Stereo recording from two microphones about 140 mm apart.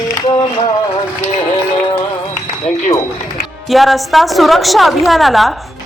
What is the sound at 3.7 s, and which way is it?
A woman's voice, centre (ahead or behind).